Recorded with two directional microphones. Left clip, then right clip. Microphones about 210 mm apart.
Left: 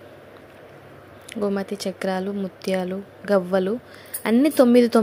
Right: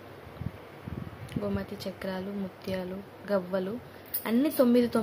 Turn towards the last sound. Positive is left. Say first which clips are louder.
# left 9 dB
turn(degrees=35)  # may be behind; listen again after turning